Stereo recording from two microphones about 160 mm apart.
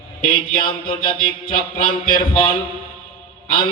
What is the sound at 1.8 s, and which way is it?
Speech, 65° left (ahead or behind).